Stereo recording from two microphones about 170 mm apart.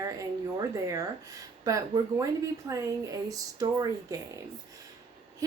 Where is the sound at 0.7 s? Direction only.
20° right (ahead or behind).